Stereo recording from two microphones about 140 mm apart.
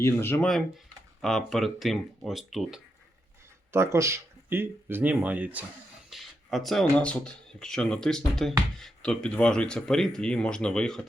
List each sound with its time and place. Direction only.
0.0 s speech: 15° left (ahead or behind)
1.2 s speech: centre (ahead or behind)
3.7 s speech: 20° right (ahead or behind)
6.1 s speech: centre (ahead or behind)